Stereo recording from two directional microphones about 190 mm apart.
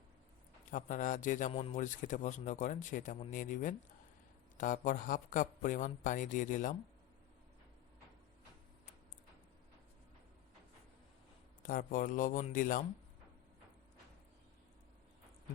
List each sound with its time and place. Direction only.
0.7 s speech: 45° left (ahead or behind)
1.5 s speech: 30° left (ahead or behind)
1.8 s speech: 40° left (ahead or behind)
11.6 s speech: 45° left (ahead or behind)